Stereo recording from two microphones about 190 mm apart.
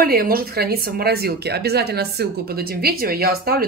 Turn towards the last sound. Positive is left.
turn(degrees=-55)  # may be behind; listen again after turning